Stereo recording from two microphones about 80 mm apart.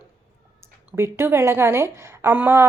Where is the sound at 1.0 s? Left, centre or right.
Right.